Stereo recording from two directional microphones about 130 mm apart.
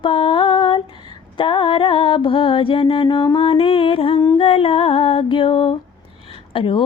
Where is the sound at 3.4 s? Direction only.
45° left (ahead or behind).